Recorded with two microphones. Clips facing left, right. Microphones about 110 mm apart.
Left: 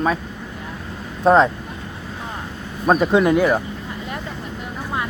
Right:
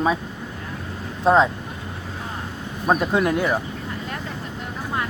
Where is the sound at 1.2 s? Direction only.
5° left (ahead or behind).